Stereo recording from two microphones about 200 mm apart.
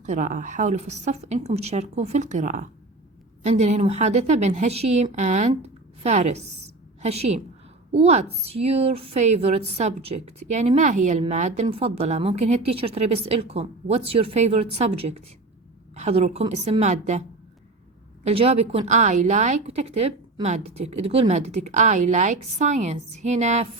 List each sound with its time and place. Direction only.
0.0 s a woman's voice: 40° right (ahead or behind)
18.3 s a woman's voice: 30° right (ahead or behind)